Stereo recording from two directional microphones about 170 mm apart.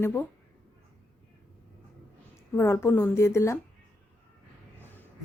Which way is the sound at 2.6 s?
15° left (ahead or behind).